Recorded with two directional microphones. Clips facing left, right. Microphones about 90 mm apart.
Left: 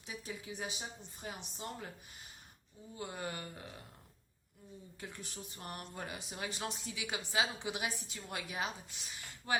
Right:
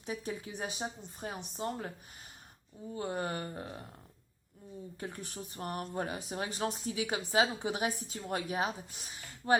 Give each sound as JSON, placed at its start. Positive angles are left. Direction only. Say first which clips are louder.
{"t": 0.0, "sound": "speech", "louder": "right 7 dB", "side_deg": -45}
{"t": 2.9, "sound": "speech", "louder": "right 7 dB", "side_deg": -40}
{"t": 4.9, "sound": "speech", "louder": "right 5 dB", "side_deg": -45}